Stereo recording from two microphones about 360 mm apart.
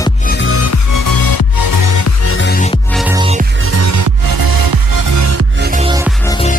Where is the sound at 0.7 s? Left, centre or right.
Left.